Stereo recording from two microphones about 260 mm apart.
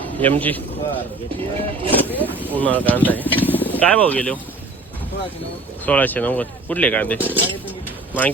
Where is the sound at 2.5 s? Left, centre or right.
Centre.